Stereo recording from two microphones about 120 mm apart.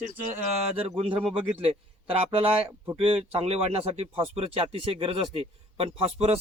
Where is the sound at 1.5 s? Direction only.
50° right (ahead or behind).